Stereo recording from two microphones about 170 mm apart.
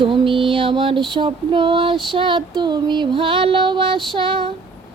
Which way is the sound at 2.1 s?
30° right (ahead or behind).